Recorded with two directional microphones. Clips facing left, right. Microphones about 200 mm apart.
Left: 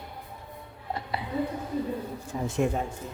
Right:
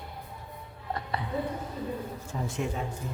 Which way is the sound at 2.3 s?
15° left (ahead or behind).